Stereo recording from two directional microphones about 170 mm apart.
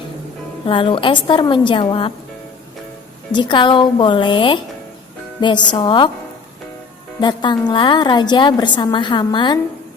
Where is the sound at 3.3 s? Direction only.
25° left (ahead or behind).